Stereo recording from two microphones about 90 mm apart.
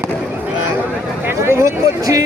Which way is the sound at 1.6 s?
35° right (ahead or behind).